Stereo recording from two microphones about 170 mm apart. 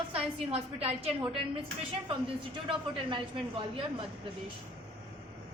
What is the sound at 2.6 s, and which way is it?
A woman's voice, 30° right (ahead or behind).